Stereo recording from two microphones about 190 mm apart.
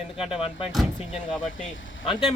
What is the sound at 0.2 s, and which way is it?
Speech, 30° left (ahead or behind).